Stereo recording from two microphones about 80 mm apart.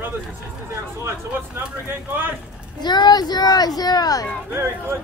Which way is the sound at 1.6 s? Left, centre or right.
Right.